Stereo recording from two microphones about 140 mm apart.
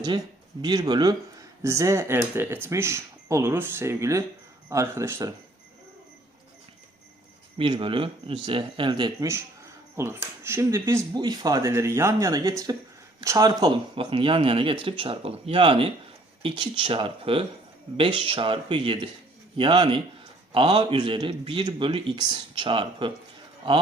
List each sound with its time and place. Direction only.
0.6 s speech: 30° right (ahead or behind)
7.6 s speech: 35° right (ahead or behind)
9.9 s speech: 20° right (ahead or behind)
13.5 s speech: 35° right (ahead or behind)